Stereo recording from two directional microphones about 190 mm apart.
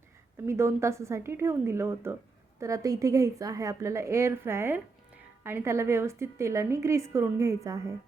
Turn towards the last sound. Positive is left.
turn(degrees=-15)  # may be behind; listen again after turning